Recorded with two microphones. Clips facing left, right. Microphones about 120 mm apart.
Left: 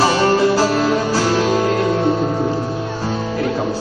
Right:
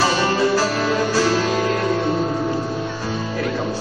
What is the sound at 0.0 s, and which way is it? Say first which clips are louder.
Music: left 4 dB; 30° left (ahead or behind).